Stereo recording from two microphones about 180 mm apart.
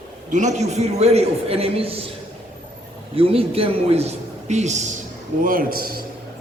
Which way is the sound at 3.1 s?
30° right (ahead or behind).